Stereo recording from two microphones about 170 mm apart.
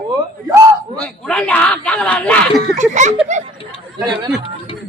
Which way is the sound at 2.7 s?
45° right (ahead or behind).